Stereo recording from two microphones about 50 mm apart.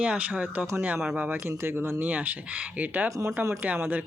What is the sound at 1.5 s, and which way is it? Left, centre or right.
Speech, right.